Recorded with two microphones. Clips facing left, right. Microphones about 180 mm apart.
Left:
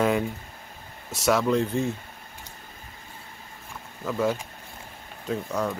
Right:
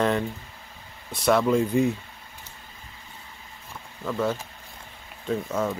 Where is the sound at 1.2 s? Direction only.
Centre (ahead or behind).